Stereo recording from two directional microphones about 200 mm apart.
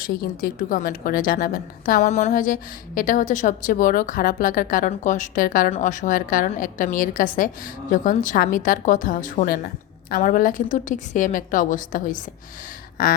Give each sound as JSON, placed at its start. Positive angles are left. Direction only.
{"t": 0.0, "sound": "a woman's voice", "side_deg": 50}